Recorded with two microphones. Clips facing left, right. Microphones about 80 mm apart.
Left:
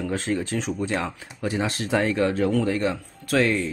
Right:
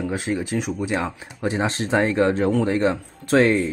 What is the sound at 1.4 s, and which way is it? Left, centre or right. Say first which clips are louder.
Speech: right 3 dB; right.